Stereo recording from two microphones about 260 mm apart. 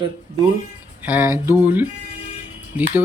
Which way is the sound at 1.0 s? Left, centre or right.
Centre.